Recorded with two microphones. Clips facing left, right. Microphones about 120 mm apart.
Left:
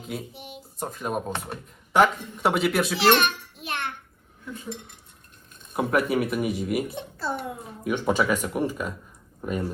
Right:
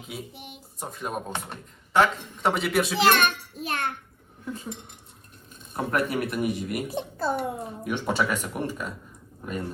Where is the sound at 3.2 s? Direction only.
40° right (ahead or behind).